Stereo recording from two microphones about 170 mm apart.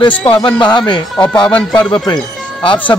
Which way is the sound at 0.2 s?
30° left (ahead or behind).